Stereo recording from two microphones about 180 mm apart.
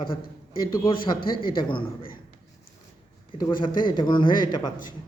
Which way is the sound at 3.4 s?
25° left (ahead or behind).